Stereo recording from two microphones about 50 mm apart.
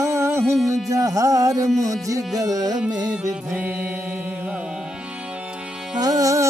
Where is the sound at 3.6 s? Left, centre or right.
Right.